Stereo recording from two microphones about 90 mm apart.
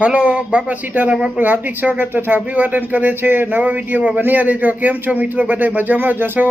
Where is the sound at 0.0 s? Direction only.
15° right (ahead or behind).